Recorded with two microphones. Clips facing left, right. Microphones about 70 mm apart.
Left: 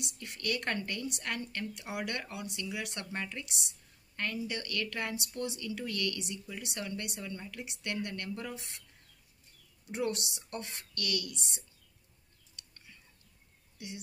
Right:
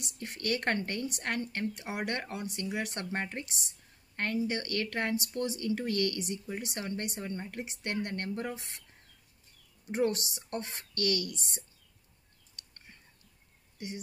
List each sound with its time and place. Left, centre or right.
0.0 s a woman's voice: right
9.8 s a woman's voice: right
12.5 s a sound: right